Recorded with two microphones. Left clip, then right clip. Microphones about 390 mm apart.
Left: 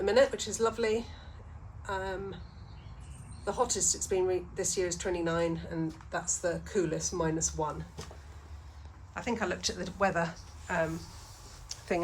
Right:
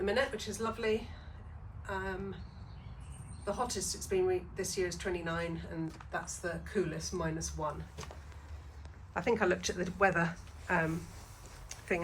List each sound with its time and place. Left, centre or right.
0.0 s a woman's voice: centre
3.4 s a woman's voice: centre
9.1 s a woman's voice: centre
11.7 s tick-tock: centre